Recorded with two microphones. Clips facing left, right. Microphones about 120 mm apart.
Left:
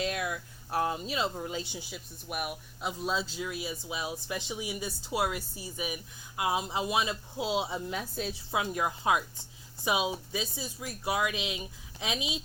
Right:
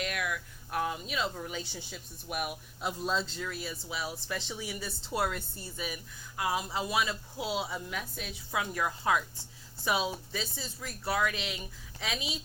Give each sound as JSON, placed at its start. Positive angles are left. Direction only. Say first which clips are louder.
{"t": 0.0, "sound": "speech", "louder": "left 2 dB", "side_deg": 25}
{"t": 1.8, "sound": "speech", "louder": "left 2 dB", "side_deg": 5}
{"t": 8.5, "sound": "speech", "louder": "left 1 dB", "side_deg": 20}